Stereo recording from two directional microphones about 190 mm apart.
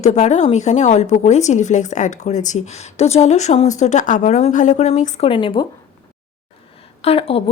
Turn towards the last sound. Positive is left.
turn(degrees=30)  # may be behind; listen again after turning